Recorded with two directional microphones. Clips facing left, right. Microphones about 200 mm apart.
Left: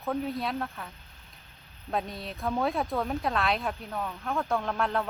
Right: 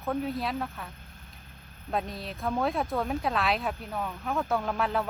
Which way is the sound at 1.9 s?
Centre (ahead or behind).